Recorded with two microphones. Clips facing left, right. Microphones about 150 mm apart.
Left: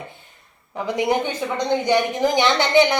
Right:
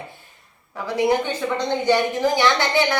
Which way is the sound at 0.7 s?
20° left (ahead or behind).